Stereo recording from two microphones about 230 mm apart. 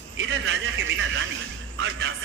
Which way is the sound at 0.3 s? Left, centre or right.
Right.